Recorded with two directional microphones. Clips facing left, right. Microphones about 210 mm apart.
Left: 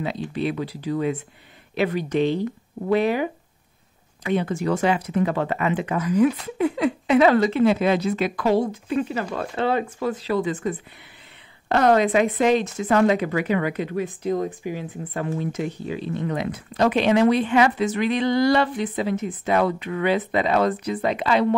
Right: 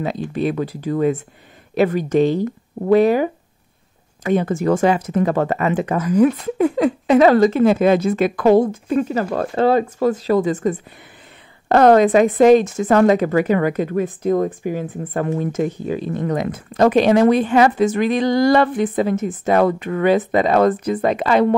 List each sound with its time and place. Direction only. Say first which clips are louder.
0.0 s a woman's voice: right 4 dB; 45° right (ahead or behind)